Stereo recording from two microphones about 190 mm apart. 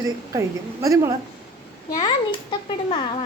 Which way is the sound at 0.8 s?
15° right (ahead or behind).